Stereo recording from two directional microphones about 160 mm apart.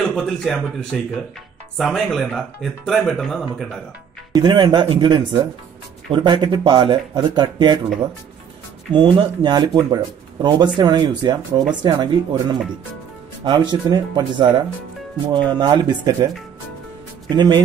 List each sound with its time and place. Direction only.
0.0 s speech: 5° left (ahead or behind)
4.3 s speech: 30° right (ahead or behind)
8.9 s speech: 30° right (ahead or behind)
15.5 s speech: 25° right (ahead or behind)
17.3 s speech: 25° right (ahead or behind)